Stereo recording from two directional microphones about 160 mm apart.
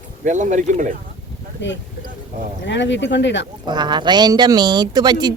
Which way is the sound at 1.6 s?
90° left.